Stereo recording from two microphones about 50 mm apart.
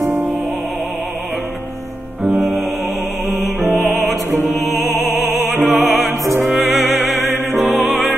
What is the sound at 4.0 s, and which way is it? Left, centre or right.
Music, centre.